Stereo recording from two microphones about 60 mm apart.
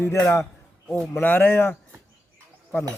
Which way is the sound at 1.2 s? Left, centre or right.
Left.